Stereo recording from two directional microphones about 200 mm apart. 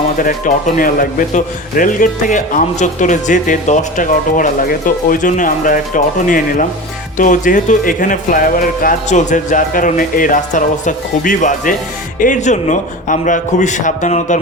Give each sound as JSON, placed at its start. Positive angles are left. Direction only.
{"t": 0.2, "sound": "a man's voice", "side_deg": 45}